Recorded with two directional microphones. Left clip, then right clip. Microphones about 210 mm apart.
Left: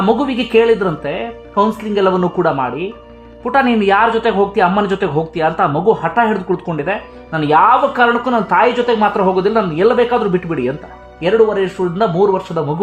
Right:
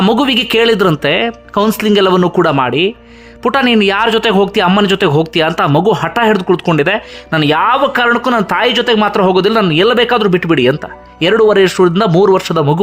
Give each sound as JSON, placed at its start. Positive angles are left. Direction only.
{"t": 0.0, "sound": "speech", "side_deg": -25}